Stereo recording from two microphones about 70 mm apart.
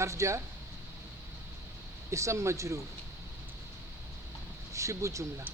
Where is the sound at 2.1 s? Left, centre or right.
Right.